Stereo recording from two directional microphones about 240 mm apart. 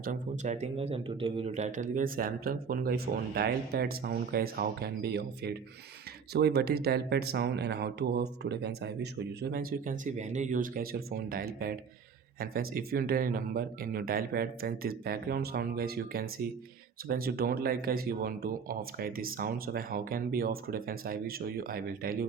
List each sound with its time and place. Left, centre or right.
0.0 s speech: right